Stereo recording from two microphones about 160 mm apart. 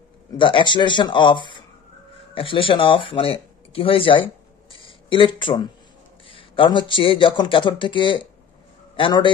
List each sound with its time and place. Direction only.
0.4 s a man's voice: 30° left (ahead or behind)